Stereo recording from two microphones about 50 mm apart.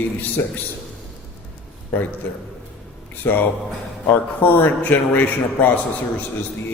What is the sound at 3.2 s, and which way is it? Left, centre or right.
A man's voice, left.